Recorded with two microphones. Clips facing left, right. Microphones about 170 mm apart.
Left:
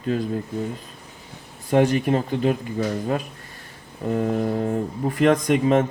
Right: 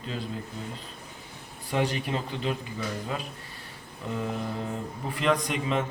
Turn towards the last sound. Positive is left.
turn(degrees=45)  # may be behind; listen again after turning